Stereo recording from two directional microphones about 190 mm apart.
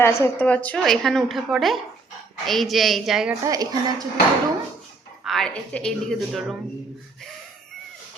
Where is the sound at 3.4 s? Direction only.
20° right (ahead or behind).